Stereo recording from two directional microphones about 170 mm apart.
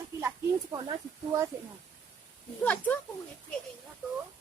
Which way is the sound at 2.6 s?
10° left (ahead or behind).